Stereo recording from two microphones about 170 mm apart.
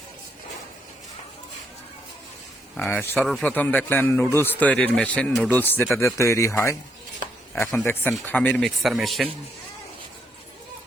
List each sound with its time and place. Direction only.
2.7 s speech: 10° left (ahead or behind)